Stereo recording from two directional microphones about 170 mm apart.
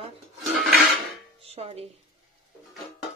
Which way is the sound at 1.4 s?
40° right (ahead or behind).